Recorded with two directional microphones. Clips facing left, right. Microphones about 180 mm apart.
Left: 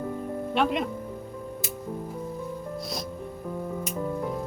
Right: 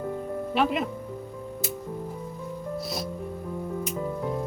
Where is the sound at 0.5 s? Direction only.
5° right (ahead or behind).